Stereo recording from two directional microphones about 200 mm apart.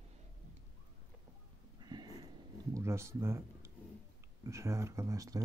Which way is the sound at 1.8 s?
20° right (ahead or behind).